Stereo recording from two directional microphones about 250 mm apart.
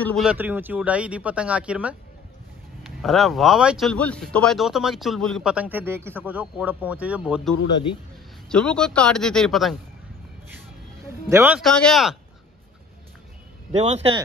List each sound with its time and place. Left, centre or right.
0.0 s speech: centre
11.2 s speech: centre
13.7 s speech: right